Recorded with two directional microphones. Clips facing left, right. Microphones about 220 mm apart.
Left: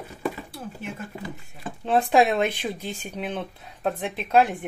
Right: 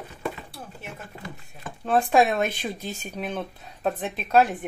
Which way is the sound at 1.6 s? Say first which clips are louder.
Left 1 dB; 20° left (ahead or behind).